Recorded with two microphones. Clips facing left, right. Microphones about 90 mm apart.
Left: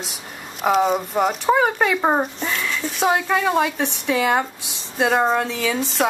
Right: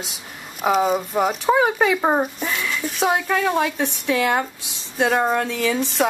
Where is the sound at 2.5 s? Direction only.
5° right (ahead or behind).